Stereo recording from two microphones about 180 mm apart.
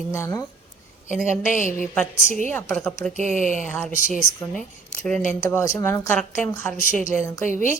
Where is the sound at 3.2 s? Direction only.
40° right (ahead or behind).